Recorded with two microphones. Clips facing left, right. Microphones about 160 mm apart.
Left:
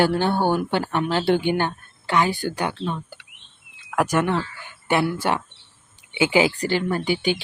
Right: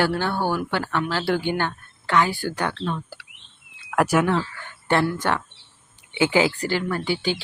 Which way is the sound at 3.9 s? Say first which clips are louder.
Right 1 dB; 5° right (ahead or behind).